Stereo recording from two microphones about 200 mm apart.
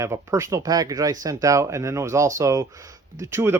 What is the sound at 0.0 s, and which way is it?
Speech, 15° right (ahead or behind).